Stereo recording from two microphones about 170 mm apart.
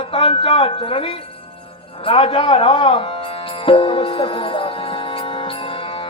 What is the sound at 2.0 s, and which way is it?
Music, 30° left (ahead or behind).